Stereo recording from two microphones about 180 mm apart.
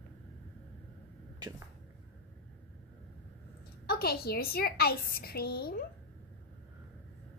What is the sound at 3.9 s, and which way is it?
A woman's voice, 60° left (ahead or behind).